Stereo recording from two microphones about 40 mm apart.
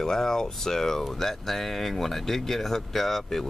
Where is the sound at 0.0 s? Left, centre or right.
Centre.